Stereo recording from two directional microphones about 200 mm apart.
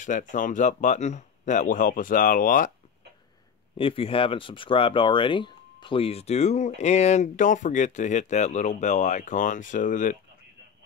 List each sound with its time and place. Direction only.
0.0 s speech: 40° left (ahead or behind)
3.7 s speech: 25° left (ahead or behind)